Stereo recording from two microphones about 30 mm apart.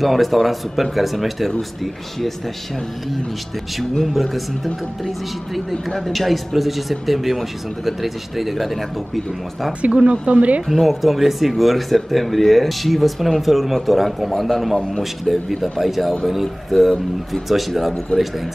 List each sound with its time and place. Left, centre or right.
0.0 s speech: centre
4.0 s speech: centre
10.2 s speech: right
10.7 s speech: centre
16.7 s speech: centre
17.3 s speech: centre